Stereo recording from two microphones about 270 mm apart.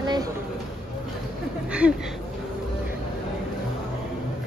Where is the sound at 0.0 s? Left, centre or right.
Centre.